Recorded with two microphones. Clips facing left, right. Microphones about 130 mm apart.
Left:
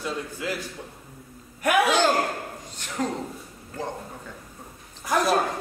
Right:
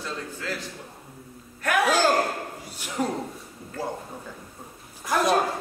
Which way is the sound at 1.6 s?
15° left (ahead or behind).